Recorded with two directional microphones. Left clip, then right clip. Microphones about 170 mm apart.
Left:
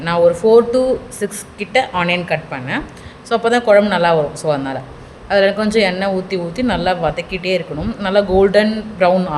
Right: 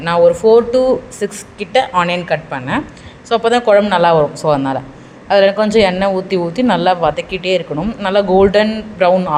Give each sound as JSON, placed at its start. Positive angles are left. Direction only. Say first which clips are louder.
{"t": 0.0, "sound": "speech", "louder": "right 3 dB", "side_deg": -15}
{"t": 7.8, "sound": "speech", "louder": "right 1 dB", "side_deg": -5}